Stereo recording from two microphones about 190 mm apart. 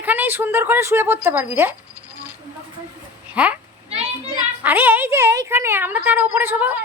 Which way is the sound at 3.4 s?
5° right (ahead or behind).